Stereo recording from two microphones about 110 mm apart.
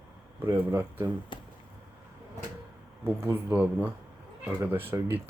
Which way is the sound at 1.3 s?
45° left (ahead or behind).